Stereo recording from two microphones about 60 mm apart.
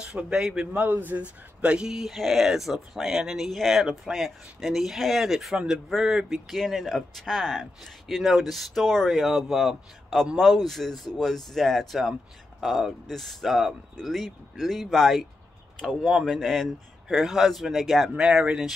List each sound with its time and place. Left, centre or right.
0.0 s a man's voice: centre
0.8 s speech: right
1.9 s speech: centre
16.0 s a man's voice: centre
16.3 s speech: centre
18.1 s a man's voice: centre